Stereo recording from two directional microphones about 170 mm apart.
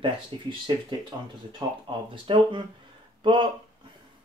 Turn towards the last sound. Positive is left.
turn(degrees=-30)  # may be behind; listen again after turning